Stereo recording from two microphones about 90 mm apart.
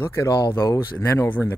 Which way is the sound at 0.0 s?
30° left (ahead or behind).